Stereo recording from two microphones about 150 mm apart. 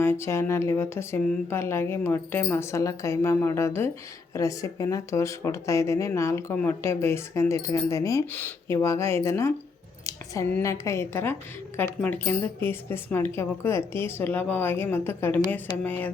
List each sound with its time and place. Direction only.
0.0 s a woman's voice: 15° left (ahead or behind)
10.1 s a sound: 20° left (ahead or behind)
10.5 s a woman's voice: 20° left (ahead or behind)